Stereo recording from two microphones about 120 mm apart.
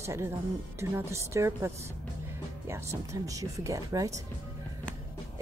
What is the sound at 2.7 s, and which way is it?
Speech, 25° right (ahead or behind).